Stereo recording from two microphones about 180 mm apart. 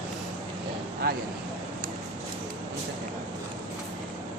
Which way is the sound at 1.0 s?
60° right (ahead or behind).